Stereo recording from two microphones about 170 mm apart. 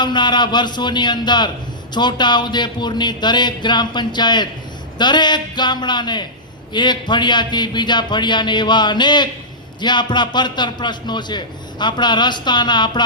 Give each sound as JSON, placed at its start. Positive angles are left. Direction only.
{"t": 0.0, "sound": "a man's voice", "side_deg": 25}